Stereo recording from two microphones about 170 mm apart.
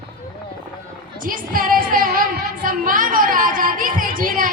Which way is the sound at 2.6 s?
55° right (ahead or behind).